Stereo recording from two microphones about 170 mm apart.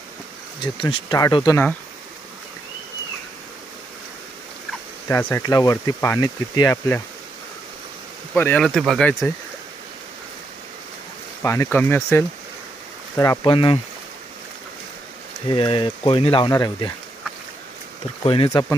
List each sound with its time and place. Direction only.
0.6 s speech: 30° left (ahead or behind)
5.0 s speech: 15° left (ahead or behind)
8.4 s speech: 15° left (ahead or behind)
8.8 s speech: centre (ahead or behind)
11.4 s speech: 15° left (ahead or behind)
13.5 s speech: 30° left (ahead or behind)
15.4 s speech: 30° left (ahead or behind)
18.2 s speech: 30° left (ahead or behind)